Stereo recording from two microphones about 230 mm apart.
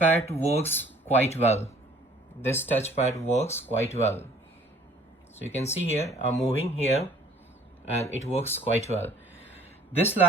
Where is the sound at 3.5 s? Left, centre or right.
Centre.